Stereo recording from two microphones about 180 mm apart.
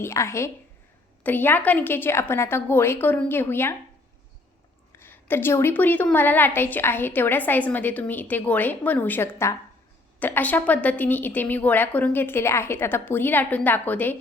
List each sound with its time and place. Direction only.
0.0 s a woman's voice: 15° left (ahead or behind)
4.9 s a woman's voice: 10° left (ahead or behind)